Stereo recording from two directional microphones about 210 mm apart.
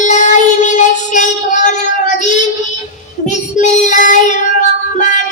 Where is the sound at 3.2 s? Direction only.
35° left (ahead or behind).